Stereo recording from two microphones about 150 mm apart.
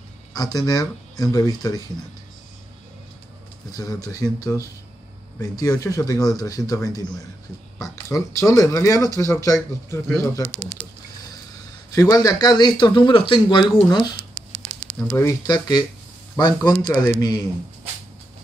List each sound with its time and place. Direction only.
0.3 s speech: 25° left (ahead or behind)
3.7 s speech: 25° left (ahead or behind)
11.9 s speech: 20° left (ahead or behind)
15.0 s speech: 15° left (ahead or behind)